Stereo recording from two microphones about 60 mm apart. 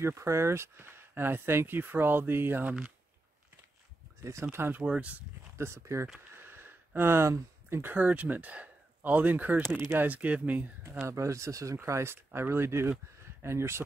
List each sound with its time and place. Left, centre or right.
0.0 s speech: right
4.2 s speech: right
4.8 s speech: centre
5.6 s speech: right
6.3 s a sound: right
7.9 s speech: right
10.9 s speech: right